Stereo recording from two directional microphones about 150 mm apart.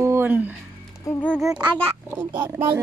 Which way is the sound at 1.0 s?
10° left (ahead or behind).